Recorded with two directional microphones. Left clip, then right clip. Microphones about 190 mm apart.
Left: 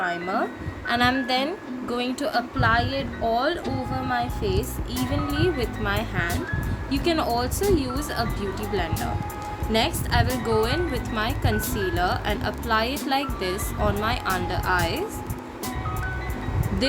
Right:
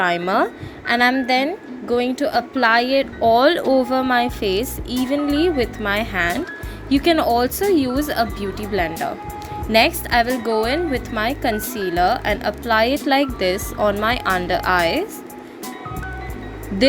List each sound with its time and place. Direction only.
0.0 s a woman's voice: 40° right (ahead or behind)
0.9 s a woman's voice: 30° right (ahead or behind)